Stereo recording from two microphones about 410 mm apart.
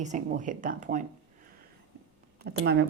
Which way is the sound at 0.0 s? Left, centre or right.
Centre.